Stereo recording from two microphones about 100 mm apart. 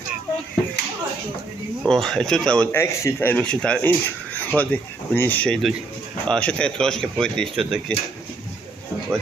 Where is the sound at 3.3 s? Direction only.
10° left (ahead or behind).